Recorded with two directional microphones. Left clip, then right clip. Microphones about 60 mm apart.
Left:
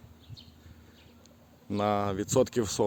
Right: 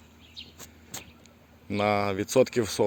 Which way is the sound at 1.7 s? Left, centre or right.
Centre.